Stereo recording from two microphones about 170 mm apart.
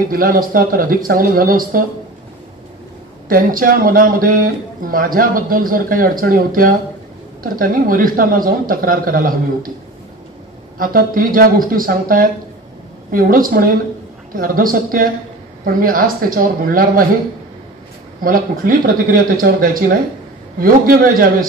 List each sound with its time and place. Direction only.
0.1 s speech: 60° right (ahead or behind)
3.3 s speech: 55° right (ahead or behind)
10.8 s speech: 55° right (ahead or behind)
18.2 s speech: 55° right (ahead or behind)